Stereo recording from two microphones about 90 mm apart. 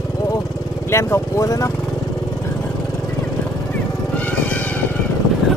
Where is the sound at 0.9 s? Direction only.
30° left (ahead or behind).